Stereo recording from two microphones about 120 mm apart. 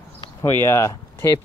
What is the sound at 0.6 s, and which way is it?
Speech, 25° left (ahead or behind).